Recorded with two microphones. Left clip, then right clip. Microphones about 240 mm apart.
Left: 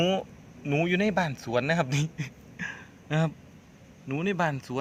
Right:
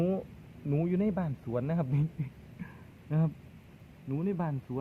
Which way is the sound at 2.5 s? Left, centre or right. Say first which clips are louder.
Left 16 dB; centre.